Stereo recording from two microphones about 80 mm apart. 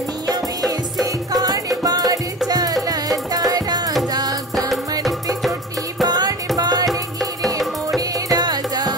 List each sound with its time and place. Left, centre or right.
1.3 s music: right
6.0 s music: right
8.3 s music: right